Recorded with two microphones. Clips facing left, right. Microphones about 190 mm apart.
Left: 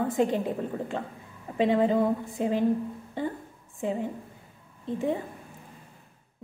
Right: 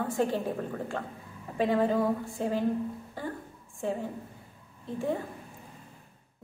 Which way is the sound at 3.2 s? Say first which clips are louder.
Left 6 dB; 20° left (ahead or behind).